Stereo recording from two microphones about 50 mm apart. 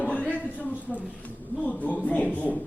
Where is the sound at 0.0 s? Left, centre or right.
Left.